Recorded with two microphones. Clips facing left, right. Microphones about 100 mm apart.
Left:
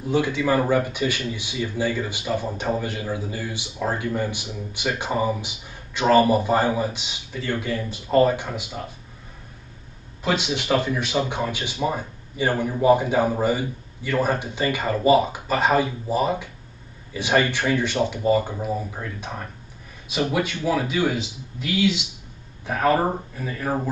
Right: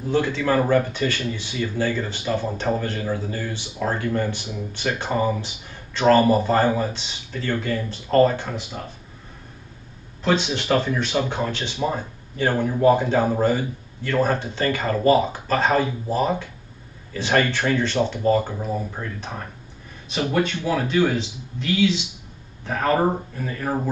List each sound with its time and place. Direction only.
0.1 s speech: 10° left (ahead or behind)
10.2 s speech: 5° left (ahead or behind)